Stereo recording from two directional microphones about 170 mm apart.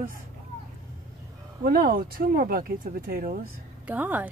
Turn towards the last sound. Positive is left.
turn(degrees=-10)  # may be behind; listen again after turning